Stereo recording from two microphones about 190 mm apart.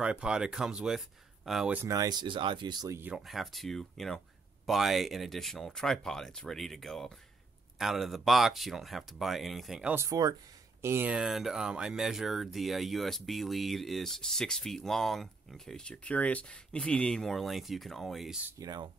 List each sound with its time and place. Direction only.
0.0 s speech: 5° right (ahead or behind)
3.3 s speech: centre (ahead or behind)
18.6 s speech: 20° right (ahead or behind)